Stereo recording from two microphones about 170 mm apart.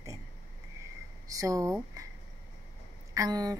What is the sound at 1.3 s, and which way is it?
Speech, 20° right (ahead or behind).